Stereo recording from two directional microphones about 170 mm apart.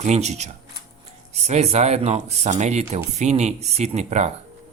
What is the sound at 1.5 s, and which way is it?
Speech, 40° right (ahead or behind).